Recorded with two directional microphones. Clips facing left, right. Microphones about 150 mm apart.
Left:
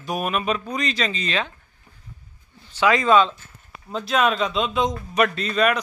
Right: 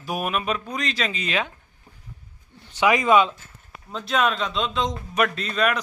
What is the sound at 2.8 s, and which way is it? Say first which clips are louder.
Speech: left 1 dB; 15° right (ahead or behind).